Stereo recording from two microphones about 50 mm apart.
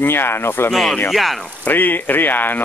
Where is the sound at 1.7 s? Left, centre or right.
Left.